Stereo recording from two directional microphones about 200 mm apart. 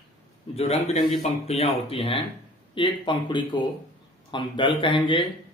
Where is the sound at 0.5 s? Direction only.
30° left (ahead or behind).